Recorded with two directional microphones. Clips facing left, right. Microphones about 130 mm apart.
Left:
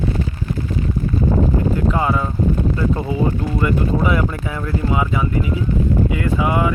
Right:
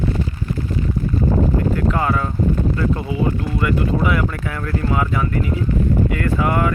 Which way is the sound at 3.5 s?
25° left (ahead or behind).